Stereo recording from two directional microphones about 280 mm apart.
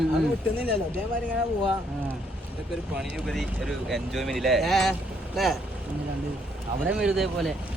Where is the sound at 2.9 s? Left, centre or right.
Centre.